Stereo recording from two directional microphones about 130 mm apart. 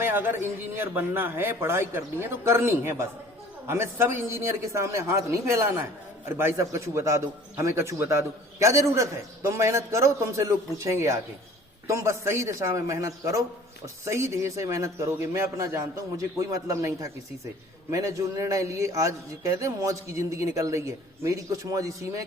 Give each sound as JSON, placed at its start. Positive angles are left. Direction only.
{"t": 0.0, "sound": "a man's voice", "side_deg": -15}